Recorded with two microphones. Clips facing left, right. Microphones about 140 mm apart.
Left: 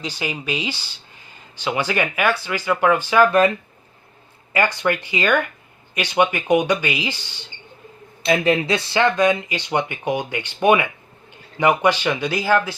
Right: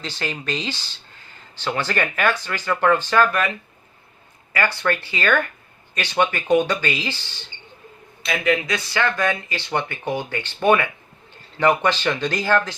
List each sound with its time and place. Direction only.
0.0 s speech: 10° left (ahead or behind)
4.5 s speech: 20° left (ahead or behind)
8.2 s speech: 30° left (ahead or behind); by 12.7 s 10° left (ahead or behind)